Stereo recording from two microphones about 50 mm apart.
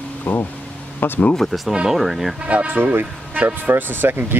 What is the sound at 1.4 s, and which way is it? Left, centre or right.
Speech, centre.